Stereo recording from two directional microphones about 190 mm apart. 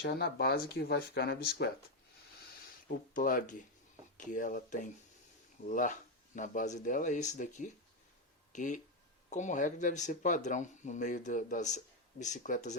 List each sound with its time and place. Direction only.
0.0 s speech: 60° left (ahead or behind)
2.8 s speech: 45° left (ahead or behind)